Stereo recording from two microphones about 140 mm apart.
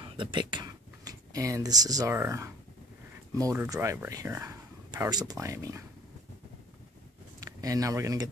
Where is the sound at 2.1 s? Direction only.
20° right (ahead or behind).